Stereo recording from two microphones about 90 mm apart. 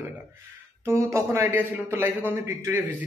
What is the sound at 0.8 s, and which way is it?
A man's voice, 30° right (ahead or behind).